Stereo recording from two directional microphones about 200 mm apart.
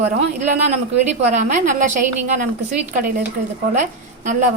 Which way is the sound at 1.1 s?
35° right (ahead or behind).